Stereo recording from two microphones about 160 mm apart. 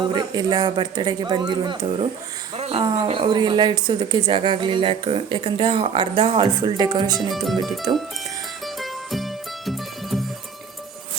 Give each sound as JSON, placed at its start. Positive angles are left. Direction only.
{"t": 0.0, "sound": "speech", "side_deg": -25}
{"t": 7.2, "sound": "music", "side_deg": 0}